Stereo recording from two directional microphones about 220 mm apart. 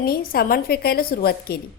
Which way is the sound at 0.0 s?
40° left (ahead or behind).